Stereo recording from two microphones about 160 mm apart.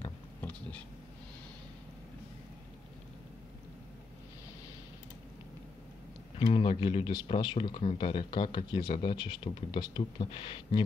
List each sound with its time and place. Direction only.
0.4 s cat: 10° left (ahead or behind)
6.4 s speech: 35° left (ahead or behind)